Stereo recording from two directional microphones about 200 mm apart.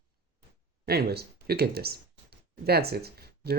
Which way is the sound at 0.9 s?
50° right (ahead or behind).